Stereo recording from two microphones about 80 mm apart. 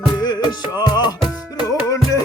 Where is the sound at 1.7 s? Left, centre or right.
Left.